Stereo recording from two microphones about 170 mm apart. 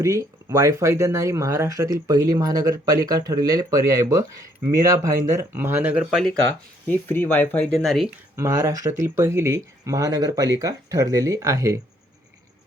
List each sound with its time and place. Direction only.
0.0 s speech: 20° right (ahead or behind)
6.8 s speech: 10° left (ahead or behind)
8.4 s speech: 20° right (ahead or behind)